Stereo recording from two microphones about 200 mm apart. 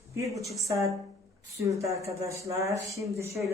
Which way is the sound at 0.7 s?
15° right (ahead or behind).